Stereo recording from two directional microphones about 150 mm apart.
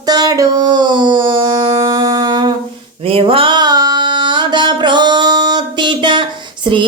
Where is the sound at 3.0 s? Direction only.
40° right (ahead or behind).